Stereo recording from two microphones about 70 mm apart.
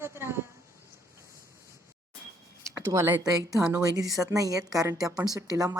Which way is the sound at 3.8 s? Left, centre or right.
Right.